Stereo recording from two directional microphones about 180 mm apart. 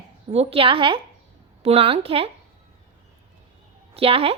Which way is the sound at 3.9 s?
30° right (ahead or behind).